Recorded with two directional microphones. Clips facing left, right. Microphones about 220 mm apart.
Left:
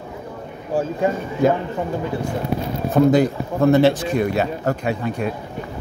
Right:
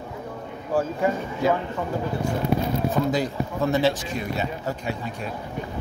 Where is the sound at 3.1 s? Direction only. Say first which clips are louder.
Left 8 dB; 55° left (ahead or behind).